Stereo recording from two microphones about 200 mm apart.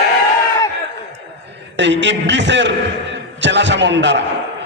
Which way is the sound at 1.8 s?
65° right (ahead or behind).